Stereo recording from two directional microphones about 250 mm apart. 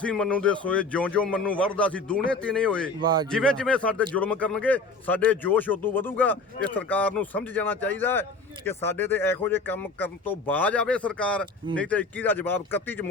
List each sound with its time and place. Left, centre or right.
0.0 s speech: centre
3.0 s speech: centre
3.2 s a man's voice: centre